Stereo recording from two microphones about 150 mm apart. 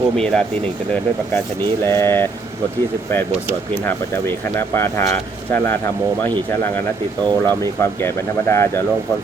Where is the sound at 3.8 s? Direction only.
15° left (ahead or behind).